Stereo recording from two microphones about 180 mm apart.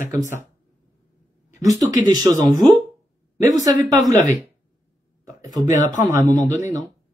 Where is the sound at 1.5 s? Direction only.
20° right (ahead or behind).